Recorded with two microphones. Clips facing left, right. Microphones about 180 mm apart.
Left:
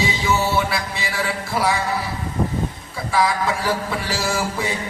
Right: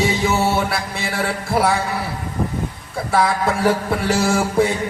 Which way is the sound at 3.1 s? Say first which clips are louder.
Right 2 dB; 55° right (ahead or behind).